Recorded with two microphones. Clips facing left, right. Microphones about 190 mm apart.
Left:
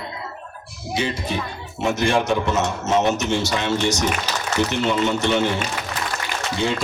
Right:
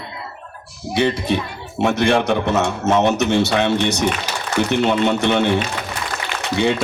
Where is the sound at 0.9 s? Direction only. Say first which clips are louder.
Right 6 dB; 65° right (ahead or behind).